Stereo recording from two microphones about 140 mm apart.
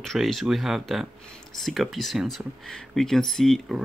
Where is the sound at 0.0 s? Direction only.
Centre (ahead or behind).